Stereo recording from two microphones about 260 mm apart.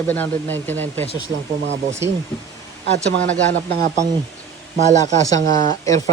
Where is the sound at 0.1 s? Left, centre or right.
Centre.